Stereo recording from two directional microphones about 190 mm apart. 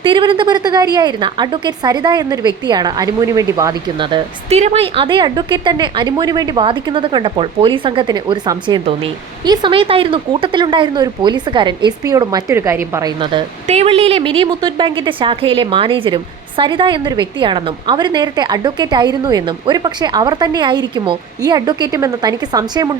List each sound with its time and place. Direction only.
0.0 s a woman's voice: 25° right (ahead or behind)
13.1 s a woman's voice: 30° right (ahead or behind)